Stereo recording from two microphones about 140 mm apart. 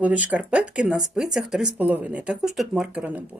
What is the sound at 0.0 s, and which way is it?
A woman's voice, 10° right (ahead or behind).